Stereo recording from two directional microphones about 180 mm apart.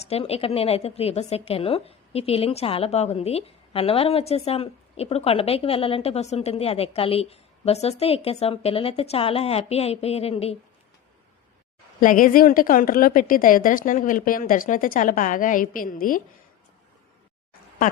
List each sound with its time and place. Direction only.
0.0 s a woman's voice: 35° left (ahead or behind)
11.9 s a woman's voice: 50° left (ahead or behind)